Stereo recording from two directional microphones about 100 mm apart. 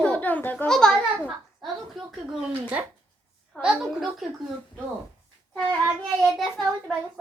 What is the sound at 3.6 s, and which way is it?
Speech, 5° right (ahead or behind).